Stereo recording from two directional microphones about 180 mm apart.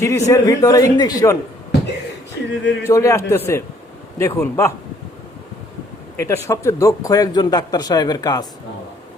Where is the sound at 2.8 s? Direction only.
15° left (ahead or behind).